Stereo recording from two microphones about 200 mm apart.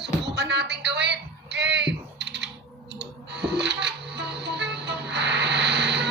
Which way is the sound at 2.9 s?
60° right (ahead or behind).